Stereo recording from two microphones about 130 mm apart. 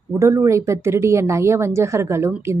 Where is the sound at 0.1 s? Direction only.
20° right (ahead or behind).